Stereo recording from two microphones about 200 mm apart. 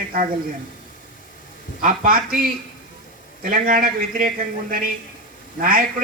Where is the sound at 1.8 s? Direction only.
45° right (ahead or behind).